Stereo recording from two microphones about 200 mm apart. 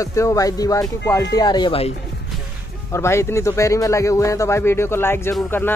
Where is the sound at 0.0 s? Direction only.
15° left (ahead or behind).